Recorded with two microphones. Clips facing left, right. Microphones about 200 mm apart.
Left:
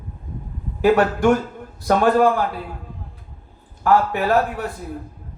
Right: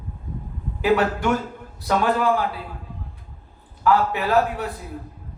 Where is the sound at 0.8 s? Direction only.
45° left (ahead or behind).